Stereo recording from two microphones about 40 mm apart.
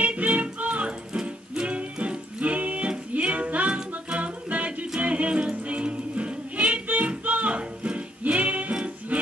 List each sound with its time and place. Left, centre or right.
0.0 s music: right